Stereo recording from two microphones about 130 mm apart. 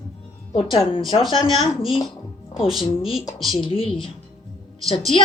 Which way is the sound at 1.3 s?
40° left (ahead or behind).